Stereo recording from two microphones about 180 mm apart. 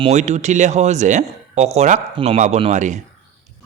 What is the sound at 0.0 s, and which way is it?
Speech, 40° right (ahead or behind).